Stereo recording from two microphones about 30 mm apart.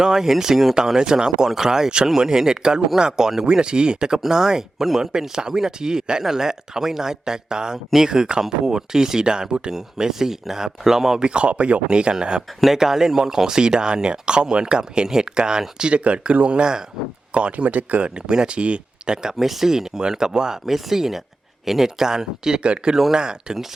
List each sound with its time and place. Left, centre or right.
0.0 s speech: centre
3.4 s speech: right
9.7 s speech: centre
11.2 s speech: right
12.7 s speech: centre
15.8 s speech: right
17.7 s speech: right
18.4 s speech: right
19.1 s speech: centre
20.0 s speech: right
20.7 s speech: centre
21.8 s speech: centre
22.6 s speech: right
23.1 s speech: right